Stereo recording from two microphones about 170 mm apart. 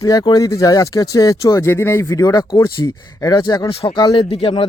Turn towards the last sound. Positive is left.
turn(degrees=30)  # may be behind; listen again after turning